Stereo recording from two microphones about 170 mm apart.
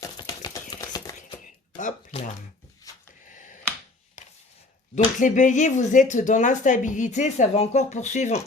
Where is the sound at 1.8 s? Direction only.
45° left (ahead or behind).